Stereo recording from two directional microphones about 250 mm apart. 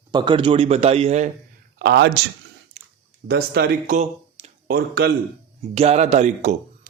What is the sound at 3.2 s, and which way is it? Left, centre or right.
Speech, right.